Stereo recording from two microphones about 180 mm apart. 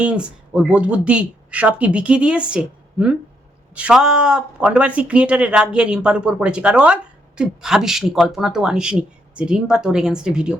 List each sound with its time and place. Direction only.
0.0 s speech: 5° right (ahead or behind)